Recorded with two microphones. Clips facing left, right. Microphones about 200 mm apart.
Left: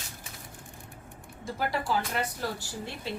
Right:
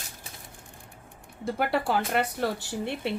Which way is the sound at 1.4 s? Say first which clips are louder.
Right 5 dB; 60° right (ahead or behind).